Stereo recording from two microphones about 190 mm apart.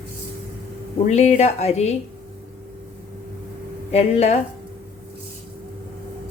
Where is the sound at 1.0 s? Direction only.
35° left (ahead or behind).